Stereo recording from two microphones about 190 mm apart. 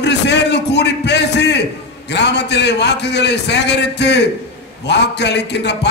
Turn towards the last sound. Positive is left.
turn(degrees=65)  # may be behind; listen again after turning